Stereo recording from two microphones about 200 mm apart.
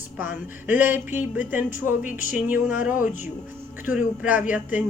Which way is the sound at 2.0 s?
40° left (ahead or behind).